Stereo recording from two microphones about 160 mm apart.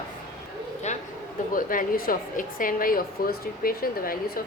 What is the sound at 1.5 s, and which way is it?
A woman's voice, 60° left (ahead or behind).